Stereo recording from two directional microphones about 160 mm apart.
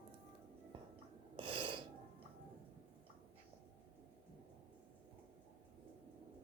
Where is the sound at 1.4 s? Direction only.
30° right (ahead or behind).